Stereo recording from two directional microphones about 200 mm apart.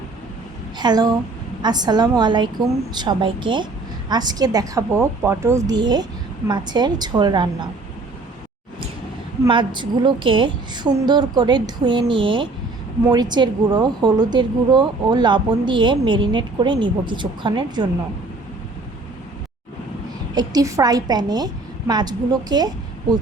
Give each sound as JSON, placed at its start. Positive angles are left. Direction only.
{"t": 0.8, "sound": "a woman's voice", "side_deg": -20}
{"t": 9.4, "sound": "a woman's voice", "side_deg": -25}
{"t": 20.3, "sound": "a woman's voice", "side_deg": -20}